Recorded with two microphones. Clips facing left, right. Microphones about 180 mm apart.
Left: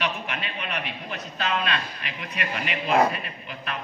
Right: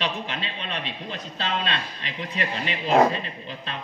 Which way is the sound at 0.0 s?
30° right (ahead or behind).